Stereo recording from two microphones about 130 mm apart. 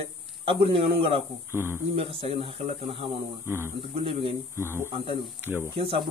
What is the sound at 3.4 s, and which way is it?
Speech, 20° right (ahead or behind).